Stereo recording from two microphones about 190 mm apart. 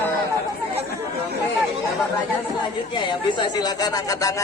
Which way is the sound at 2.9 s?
25° left (ahead or behind).